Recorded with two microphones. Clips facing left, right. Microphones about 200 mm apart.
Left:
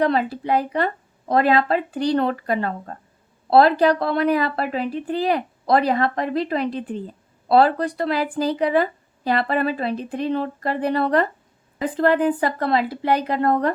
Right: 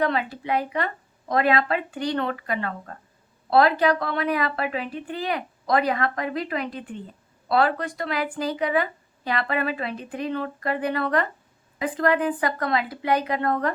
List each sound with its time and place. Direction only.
0.0 s speech: 35° left (ahead or behind)